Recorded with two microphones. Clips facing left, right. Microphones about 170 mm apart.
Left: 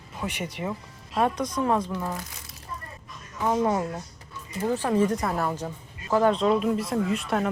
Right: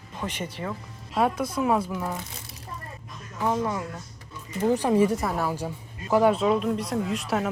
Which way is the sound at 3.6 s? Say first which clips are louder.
Left 4 dB; 35° left (ahead or behind).